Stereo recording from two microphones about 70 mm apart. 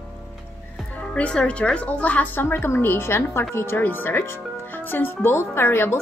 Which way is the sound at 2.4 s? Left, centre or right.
Left.